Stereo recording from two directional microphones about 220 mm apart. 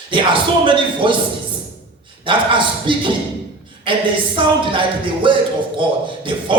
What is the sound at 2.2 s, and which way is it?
Music, 20° right (ahead or behind).